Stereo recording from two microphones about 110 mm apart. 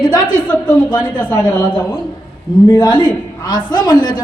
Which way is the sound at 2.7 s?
45° left (ahead or behind).